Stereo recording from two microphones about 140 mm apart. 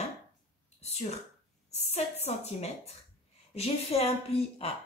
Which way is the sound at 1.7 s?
50° left (ahead or behind).